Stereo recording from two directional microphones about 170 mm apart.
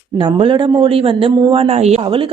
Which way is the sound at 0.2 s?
25° right (ahead or behind).